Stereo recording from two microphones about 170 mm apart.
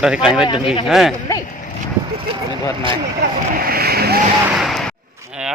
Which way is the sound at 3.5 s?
60° right (ahead or behind).